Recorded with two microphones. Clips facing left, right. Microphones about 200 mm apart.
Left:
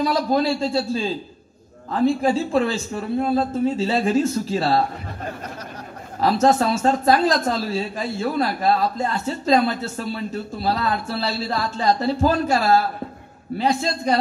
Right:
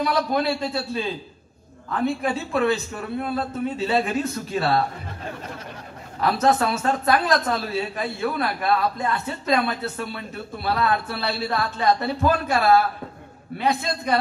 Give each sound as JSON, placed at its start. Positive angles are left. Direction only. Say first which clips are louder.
{"t": 0.0, "sound": "a man's voice", "louder": "left 3 dB", "side_deg": 30}
{"t": 6.2, "sound": "a man's voice", "louder": "left 3 dB", "side_deg": 30}